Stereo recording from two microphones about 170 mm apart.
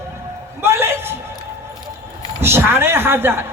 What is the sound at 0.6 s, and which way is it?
Speech, 15° right (ahead or behind).